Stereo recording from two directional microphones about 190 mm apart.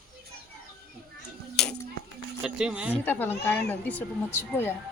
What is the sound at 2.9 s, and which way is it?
Speech, 10° left (ahead or behind).